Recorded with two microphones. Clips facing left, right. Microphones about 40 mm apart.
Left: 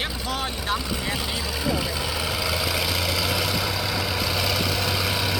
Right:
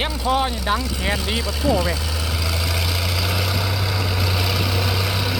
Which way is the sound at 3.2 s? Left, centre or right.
Centre.